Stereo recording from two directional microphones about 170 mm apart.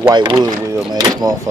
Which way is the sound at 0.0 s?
25° right (ahead or behind).